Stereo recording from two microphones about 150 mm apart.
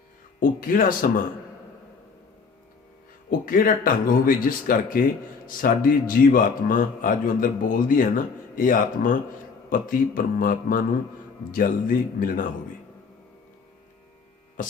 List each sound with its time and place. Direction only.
0.3 s speech: 65° left (ahead or behind)
3.2 s a man's voice: 70° left (ahead or behind)
14.6 s hum: 60° left (ahead or behind)